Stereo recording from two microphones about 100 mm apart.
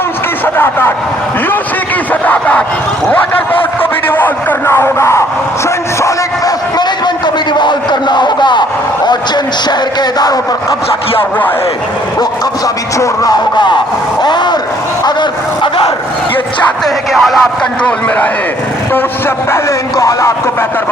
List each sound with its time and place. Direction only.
0.4 s speech: 20° left (ahead or behind)
2.2 s speech: 15° left (ahead or behind)
4.1 s speech: 20° left (ahead or behind)
6.0 s a sound: 35° left (ahead or behind)
7.6 s speech: 50° left (ahead or behind)
11.2 s speech: 20° left (ahead or behind)
13.0 s speech: 40° left (ahead or behind)
15.0 s bow-wow: 50° left (ahead or behind)
16.8 s speech: centre (ahead or behind)
20.0 s speech: 30° left (ahead or behind)